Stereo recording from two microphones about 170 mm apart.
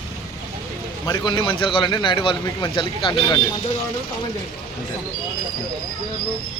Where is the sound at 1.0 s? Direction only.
25° left (ahead or behind).